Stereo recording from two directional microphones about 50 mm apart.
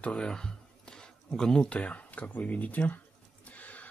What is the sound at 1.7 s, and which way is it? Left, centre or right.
Speech, left.